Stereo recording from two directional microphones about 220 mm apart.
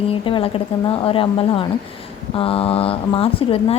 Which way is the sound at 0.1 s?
25° left (ahead or behind).